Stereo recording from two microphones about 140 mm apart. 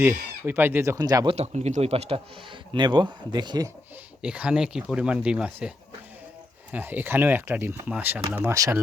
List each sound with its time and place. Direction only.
0.0 s speech: 15° right (ahead or behind)
1.4 s a man's voice: 55° right (ahead or behind); by 3.7 s 30° right (ahead or behind)
4.2 s speech: 10° right (ahead or behind)